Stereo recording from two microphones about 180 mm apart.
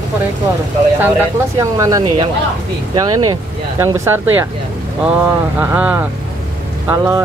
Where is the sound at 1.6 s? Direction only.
20° right (ahead or behind).